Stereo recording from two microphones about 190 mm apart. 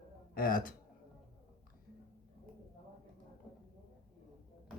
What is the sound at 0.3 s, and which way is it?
Speech, 50° left (ahead or behind).